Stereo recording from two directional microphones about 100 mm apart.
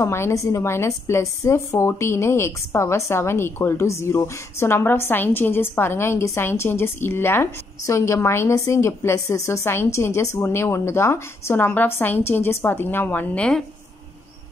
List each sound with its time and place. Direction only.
0.0 s a woman's voice: 25° left (ahead or behind); by 13.7 s 10° left (ahead or behind)